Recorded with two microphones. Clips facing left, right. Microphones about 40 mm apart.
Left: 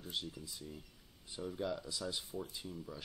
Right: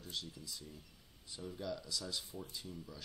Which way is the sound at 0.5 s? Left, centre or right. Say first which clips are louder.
Left 2 dB; left.